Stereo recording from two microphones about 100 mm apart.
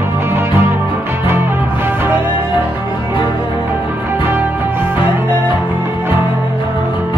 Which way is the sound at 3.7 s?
20° right (ahead or behind).